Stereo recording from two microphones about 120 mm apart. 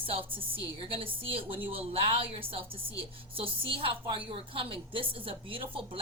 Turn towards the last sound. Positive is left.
turn(degrees=-50)  # may be behind; listen again after turning